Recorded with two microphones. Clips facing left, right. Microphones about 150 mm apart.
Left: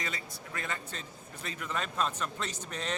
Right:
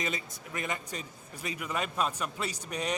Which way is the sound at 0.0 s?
20° right (ahead or behind).